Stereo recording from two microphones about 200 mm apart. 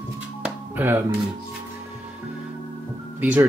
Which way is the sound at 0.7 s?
10° right (ahead or behind).